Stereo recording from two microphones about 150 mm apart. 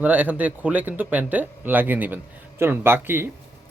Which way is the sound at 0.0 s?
10° right (ahead or behind).